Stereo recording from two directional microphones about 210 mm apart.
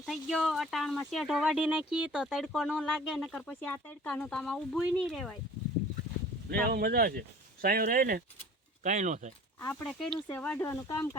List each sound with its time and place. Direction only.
0.0 s speech: centre (ahead or behind)
6.5 s speech: 45° right (ahead or behind)
9.6 s speech: 10° left (ahead or behind)